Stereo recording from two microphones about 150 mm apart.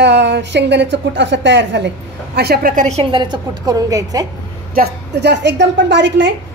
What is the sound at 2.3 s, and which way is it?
Speech, 90° right.